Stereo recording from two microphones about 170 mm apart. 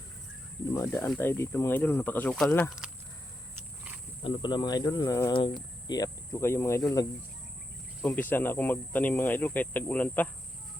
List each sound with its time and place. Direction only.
0.7 s speech: 15° left (ahead or behind)
2.6 s speech: 5° right (ahead or behind)
4.2 s speech: 25° left (ahead or behind)
8.0 s speech: 10° left (ahead or behind)